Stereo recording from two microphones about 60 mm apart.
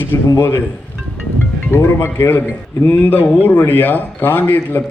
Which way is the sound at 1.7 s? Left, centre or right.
Left.